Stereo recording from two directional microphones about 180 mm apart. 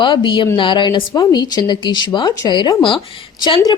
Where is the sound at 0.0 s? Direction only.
25° left (ahead or behind).